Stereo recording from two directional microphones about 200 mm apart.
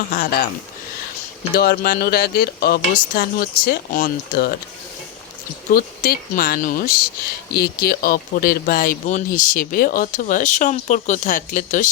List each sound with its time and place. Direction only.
0.1 s speech: 50° left (ahead or behind)
1.5 s speech: 50° left (ahead or behind)
5.7 s speech: 45° left (ahead or behind)